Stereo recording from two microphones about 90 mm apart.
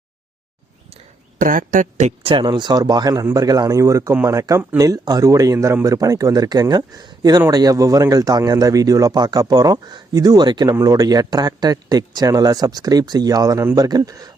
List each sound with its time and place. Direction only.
2.2 s speech: 65° right (ahead or behind); by 14.3 s 45° right (ahead or behind)